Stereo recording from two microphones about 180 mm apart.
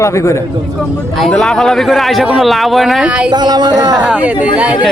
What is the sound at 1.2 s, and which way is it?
Speech, centre (ahead or behind).